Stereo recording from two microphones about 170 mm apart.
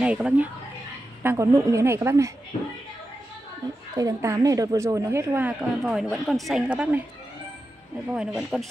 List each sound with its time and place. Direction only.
0.0 s a woman's voice: 5° right (ahead or behind)
3.9 s a woman's voice: 20° right (ahead or behind)
8.1 s speech: 5° right (ahead or behind)